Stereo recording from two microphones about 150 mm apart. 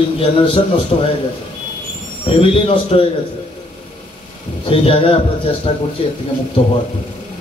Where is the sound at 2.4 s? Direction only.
40° left (ahead or behind).